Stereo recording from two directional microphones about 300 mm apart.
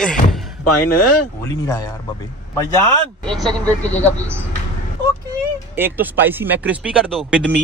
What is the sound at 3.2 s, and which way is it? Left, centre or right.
Speech, centre.